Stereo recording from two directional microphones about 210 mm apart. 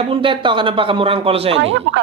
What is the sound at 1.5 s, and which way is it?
Speech, 60° right (ahead or behind).